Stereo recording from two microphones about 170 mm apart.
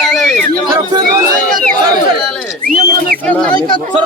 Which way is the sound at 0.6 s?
25° right (ahead or behind).